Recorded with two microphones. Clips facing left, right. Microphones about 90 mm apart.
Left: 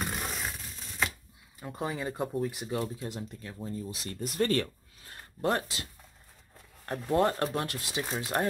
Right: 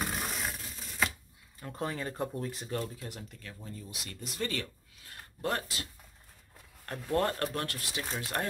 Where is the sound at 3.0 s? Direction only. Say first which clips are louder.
Left 6 dB; 25° left (ahead or behind).